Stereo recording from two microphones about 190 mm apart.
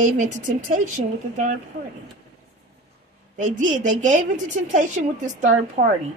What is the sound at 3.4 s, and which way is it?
Speech, 40° right (ahead or behind).